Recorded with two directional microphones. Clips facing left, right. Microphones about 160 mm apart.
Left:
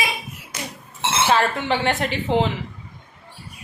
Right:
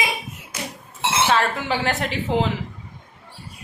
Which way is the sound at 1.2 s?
Centre (ahead or behind).